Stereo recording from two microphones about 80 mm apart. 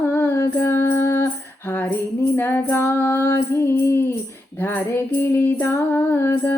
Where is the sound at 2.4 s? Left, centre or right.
Left.